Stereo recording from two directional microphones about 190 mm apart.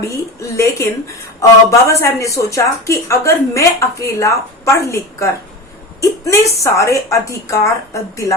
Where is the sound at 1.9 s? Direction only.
15° left (ahead or behind).